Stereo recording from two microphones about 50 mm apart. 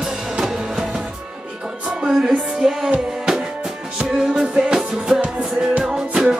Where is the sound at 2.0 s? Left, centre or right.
Right.